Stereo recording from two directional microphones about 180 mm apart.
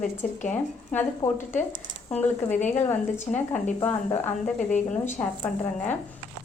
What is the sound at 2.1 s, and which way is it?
A woman's voice, 10° left (ahead or behind).